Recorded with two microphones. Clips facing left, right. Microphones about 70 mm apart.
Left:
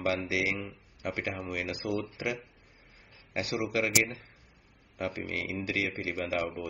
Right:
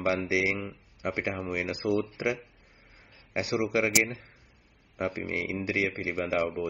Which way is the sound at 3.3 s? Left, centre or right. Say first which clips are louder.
Right 3 dB; right.